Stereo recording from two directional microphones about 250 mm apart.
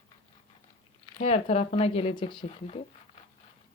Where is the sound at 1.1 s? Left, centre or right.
Left.